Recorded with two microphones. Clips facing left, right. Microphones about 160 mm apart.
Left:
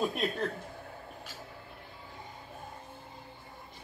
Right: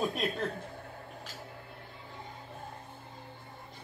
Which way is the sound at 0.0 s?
Centre (ahead or behind).